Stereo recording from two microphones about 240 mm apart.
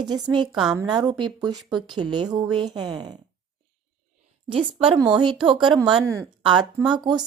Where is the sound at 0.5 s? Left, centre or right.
Centre.